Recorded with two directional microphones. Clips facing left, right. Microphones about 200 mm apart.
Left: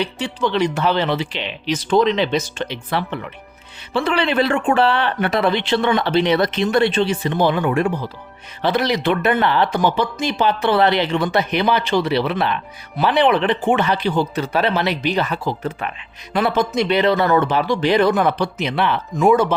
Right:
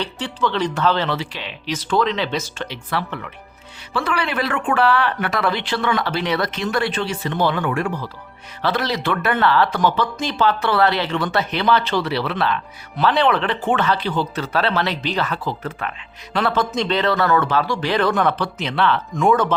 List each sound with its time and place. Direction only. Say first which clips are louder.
0.0 s speech: left 2 dB; 15° left (ahead or behind)